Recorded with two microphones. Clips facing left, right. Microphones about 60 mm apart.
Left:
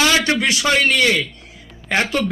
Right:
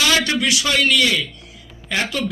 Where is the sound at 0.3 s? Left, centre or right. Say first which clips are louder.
Left 2 dB; left.